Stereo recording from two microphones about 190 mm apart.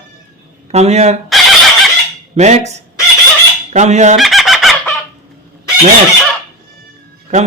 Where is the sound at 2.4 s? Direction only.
35° right (ahead or behind).